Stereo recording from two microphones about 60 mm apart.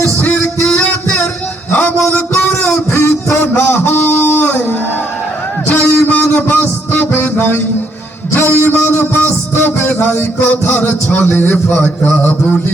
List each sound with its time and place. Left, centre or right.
0.0 s music: left
2.9 s a sound: left
5.6 s music: left
8.3 s a sound: left
8.8 s music: left
11.5 s a man's voice: left